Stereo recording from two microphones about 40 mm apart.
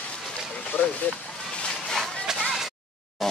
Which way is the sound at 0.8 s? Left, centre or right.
Left.